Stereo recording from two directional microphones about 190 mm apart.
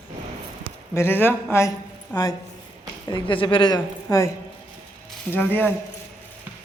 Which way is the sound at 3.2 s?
25° left (ahead or behind).